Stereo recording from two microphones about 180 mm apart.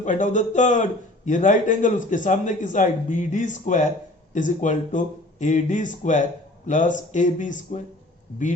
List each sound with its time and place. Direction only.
0.0 s a man's voice: 45° left (ahead or behind)